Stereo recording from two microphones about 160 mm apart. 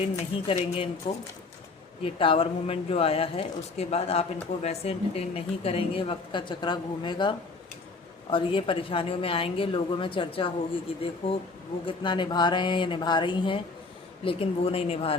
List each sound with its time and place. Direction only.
0.0 s speech: 35° left (ahead or behind)
2.0 s speech: 35° left (ahead or behind)